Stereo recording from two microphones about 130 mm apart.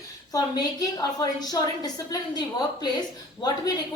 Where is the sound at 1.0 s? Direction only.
30° left (ahead or behind).